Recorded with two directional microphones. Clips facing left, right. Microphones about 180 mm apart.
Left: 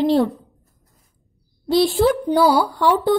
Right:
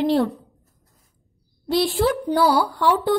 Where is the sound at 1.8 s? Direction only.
20° left (ahead or behind).